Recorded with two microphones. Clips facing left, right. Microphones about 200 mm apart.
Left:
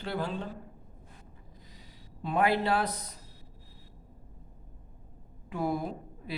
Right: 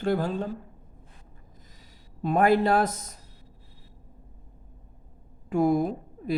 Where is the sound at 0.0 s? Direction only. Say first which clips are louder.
Right 8 dB; 45° right (ahead or behind).